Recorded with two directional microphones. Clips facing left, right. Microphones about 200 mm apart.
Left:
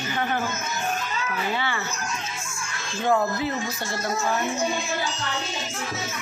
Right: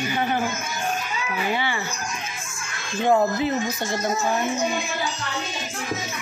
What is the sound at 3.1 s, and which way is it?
Speech, 20° right (ahead or behind).